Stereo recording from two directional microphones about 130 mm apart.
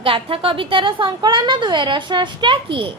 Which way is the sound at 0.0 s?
45° right (ahead or behind).